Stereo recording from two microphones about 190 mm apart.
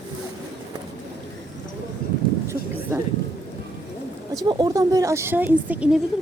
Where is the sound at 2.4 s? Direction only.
15° right (ahead or behind).